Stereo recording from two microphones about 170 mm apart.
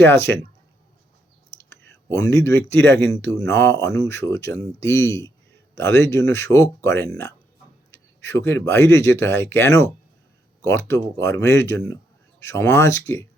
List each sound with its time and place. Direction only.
0.0 s speech: 15° left (ahead or behind)
1.7 s speech: 15° left (ahead or behind)